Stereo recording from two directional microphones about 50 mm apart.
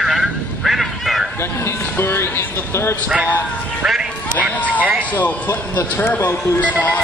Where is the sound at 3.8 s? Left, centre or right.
Centre.